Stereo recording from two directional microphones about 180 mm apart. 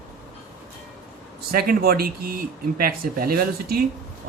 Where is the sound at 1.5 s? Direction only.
55° right (ahead or behind).